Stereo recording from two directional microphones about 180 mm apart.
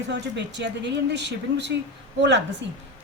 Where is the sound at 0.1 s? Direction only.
75° right (ahead or behind).